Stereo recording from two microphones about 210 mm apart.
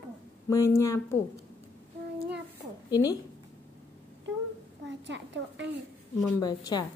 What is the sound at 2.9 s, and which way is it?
Speech, 20° left (ahead or behind).